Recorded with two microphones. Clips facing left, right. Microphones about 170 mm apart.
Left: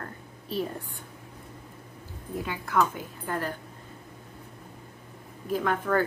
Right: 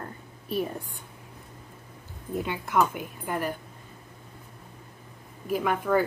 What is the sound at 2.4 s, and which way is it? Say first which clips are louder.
Speech: right 1 dB; 20° right (ahead or behind).